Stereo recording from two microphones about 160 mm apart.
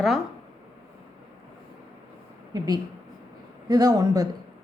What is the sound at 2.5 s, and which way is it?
A woman's voice, 25° right (ahead or behind).